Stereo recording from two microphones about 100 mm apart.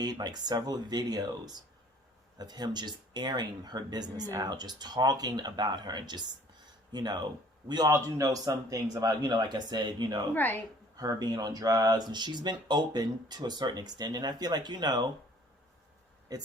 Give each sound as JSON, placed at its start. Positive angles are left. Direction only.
{"t": 0.0, "sound": "speech", "side_deg": -45}
{"t": 2.4, "sound": "speech", "side_deg": -45}
{"t": 10.3, "sound": "a woman's voice", "side_deg": 20}
{"t": 10.9, "sound": "speech", "side_deg": -40}